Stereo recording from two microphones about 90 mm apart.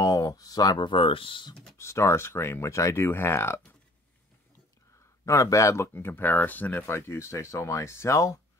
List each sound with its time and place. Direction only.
0.0 s speech: 40° left (ahead or behind)
0.8 s speech: 70° left (ahead or behind)
1.5 s computer keyboard: 5° left (ahead or behind)
1.8 s speech: 30° left (ahead or behind)
5.2 s speech: 35° left (ahead or behind)